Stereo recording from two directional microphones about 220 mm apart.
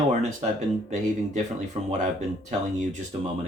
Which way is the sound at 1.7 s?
30° right (ahead or behind).